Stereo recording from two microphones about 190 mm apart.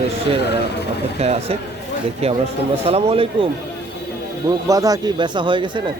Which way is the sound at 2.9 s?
30° right (ahead or behind).